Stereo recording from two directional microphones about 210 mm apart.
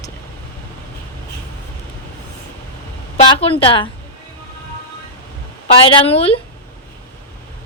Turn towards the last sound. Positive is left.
turn(degrees=25)  # may be behind; listen again after turning